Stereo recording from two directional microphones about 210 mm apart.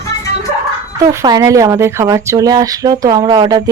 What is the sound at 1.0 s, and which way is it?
Speech, 15° right (ahead or behind).